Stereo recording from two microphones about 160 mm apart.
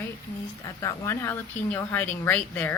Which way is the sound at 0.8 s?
20° left (ahead or behind).